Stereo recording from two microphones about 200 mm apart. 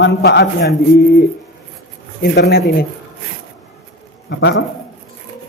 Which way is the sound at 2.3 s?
55° left (ahead or behind).